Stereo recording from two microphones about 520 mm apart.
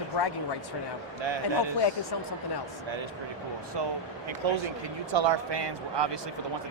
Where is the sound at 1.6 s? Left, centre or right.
Left.